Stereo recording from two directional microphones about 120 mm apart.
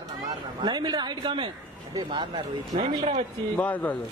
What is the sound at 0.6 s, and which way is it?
Speech, 35° right (ahead or behind).